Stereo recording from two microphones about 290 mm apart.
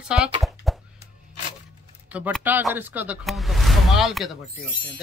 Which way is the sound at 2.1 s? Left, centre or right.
Centre.